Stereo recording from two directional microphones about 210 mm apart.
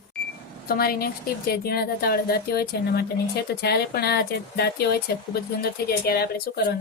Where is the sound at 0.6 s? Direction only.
45° left (ahead or behind).